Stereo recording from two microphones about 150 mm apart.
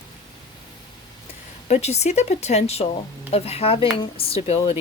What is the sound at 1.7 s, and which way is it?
Speech, 45° left (ahead or behind).